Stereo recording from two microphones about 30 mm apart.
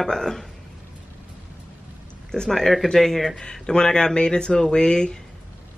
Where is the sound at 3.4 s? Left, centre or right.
Left.